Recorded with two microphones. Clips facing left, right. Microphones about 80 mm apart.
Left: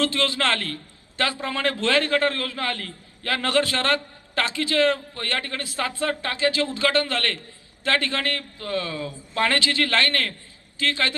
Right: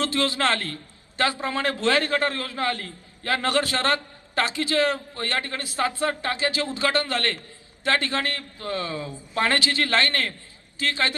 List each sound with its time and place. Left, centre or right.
0.0 s a man's voice: right